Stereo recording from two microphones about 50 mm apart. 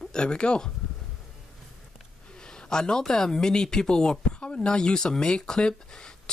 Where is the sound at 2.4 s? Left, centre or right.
Centre.